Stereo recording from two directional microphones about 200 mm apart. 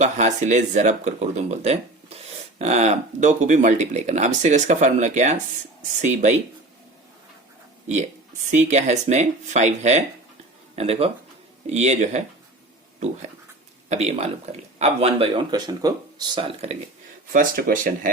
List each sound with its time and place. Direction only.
0.0 s speech: 35° right (ahead or behind)
8.4 s speech: 35° right (ahead or behind)
13.9 s speech: 30° right (ahead or behind)
17.3 s speech: 45° right (ahead or behind)